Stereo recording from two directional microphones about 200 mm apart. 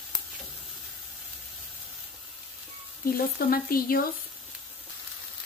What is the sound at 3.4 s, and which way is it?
Frying, 50° left (ahead or behind).